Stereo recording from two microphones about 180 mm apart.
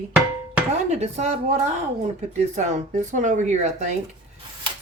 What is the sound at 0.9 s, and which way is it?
Speech, 40° right (ahead or behind).